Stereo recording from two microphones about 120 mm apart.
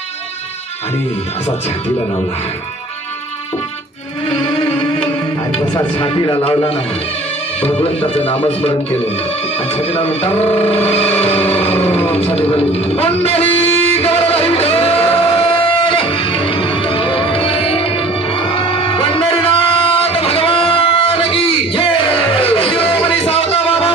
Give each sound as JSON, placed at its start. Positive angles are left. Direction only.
{"t": 4.3, "sound": "music", "side_deg": 45}
{"t": 5.9, "sound": "speech", "side_deg": 40}
{"t": 10.6, "sound": "music", "side_deg": 55}
{"t": 12.1, "sound": "speech", "side_deg": 55}
{"t": 12.5, "sound": "a sound", "side_deg": 55}